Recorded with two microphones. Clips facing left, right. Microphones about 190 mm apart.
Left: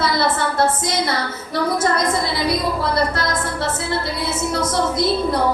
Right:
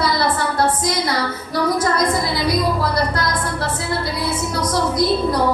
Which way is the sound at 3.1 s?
25° left (ahead or behind).